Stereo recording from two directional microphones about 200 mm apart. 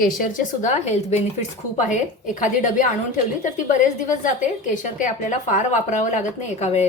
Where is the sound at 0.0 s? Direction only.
40° left (ahead or behind).